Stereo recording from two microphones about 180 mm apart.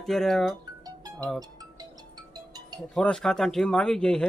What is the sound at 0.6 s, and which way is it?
Music, 20° right (ahead or behind).